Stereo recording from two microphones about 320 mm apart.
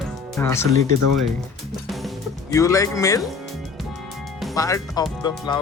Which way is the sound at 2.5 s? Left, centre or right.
Centre.